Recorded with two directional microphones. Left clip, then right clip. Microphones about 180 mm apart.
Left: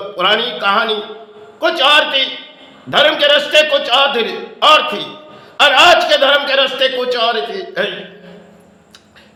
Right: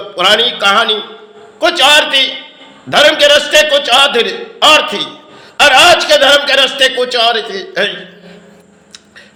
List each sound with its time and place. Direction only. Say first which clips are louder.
0.2 s a man's voice: right 5 dB; 20° right (ahead or behind)